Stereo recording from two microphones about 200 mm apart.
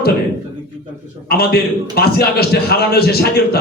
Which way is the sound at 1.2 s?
50° left (ahead or behind).